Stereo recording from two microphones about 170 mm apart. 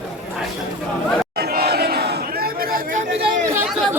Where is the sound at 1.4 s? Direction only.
65° right (ahead or behind).